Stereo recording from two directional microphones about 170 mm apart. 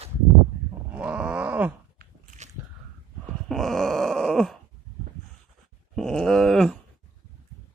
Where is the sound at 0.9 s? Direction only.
5° right (ahead or behind).